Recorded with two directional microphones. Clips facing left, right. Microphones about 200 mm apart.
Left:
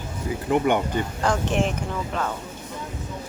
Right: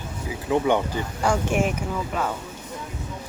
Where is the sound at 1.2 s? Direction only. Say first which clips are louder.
Right 2 dB; 10° right (ahead or behind).